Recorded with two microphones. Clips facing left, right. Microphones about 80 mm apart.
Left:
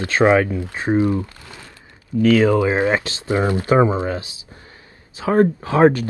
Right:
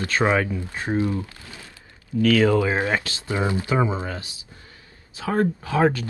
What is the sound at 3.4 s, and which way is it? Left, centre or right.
Speech, left.